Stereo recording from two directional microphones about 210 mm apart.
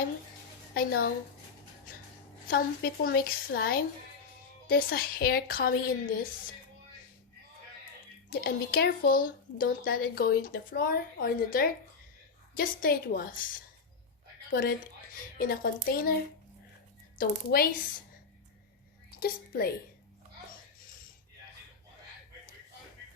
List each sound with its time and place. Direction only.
0.7 s a woman's voice: 45° left (ahead or behind)
2.5 s speech: 45° left (ahead or behind)
8.4 s speech: 45° left (ahead or behind)
14.5 s speech: 45° left (ahead or behind)
17.2 s speech: 45° left (ahead or behind)
19.2 s speech: 45° left (ahead or behind)